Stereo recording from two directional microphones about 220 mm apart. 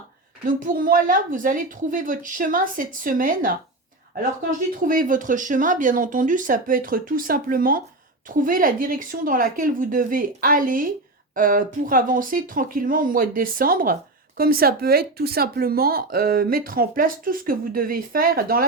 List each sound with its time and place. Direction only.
0.4 s speech: 40° right (ahead or behind)
4.8 s speech: 40° right (ahead or behind)